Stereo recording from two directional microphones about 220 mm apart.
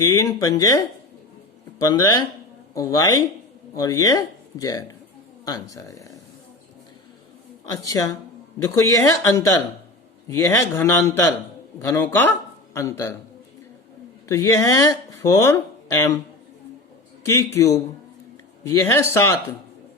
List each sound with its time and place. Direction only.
0.0 s speech: 15° left (ahead or behind)
7.6 s a woman's voice: 15° left (ahead or behind)
14.3 s speech: 15° left (ahead or behind)
17.2 s speech: 15° left (ahead or behind)